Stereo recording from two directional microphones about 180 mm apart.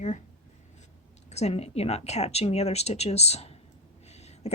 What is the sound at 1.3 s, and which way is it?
Speech, 35° left (ahead or behind).